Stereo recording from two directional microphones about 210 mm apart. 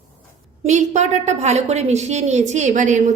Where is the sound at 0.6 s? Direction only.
35° right (ahead or behind).